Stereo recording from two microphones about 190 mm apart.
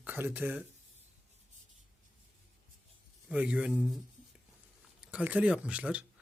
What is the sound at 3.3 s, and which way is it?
Speech, 5° right (ahead or behind).